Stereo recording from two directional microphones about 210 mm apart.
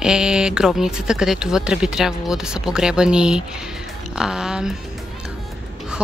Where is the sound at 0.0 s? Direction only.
5° right (ahead or behind).